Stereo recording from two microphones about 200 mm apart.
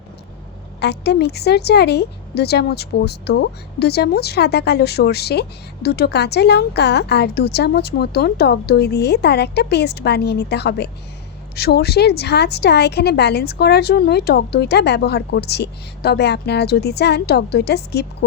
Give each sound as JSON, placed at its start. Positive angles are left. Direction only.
{"t": 0.8, "sound": "a woman's voice", "side_deg": 55}